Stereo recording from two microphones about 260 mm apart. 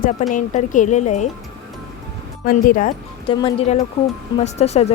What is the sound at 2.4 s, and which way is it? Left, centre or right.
Speech, left.